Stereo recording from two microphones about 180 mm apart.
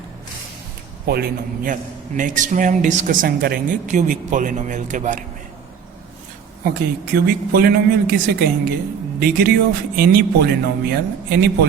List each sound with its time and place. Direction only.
1.0 s a man's voice: 60° right (ahead or behind); by 5.2 s 45° right (ahead or behind)
6.7 s speech: 60° right (ahead or behind)
9.9 s speech: 55° right (ahead or behind)